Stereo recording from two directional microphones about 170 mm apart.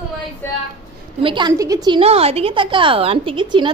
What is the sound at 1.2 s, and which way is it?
A woman's voice, 25° right (ahead or behind).